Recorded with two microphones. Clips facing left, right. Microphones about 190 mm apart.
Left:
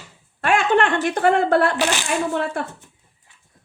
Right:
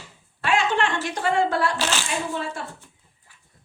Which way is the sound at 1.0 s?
60° left (ahead or behind).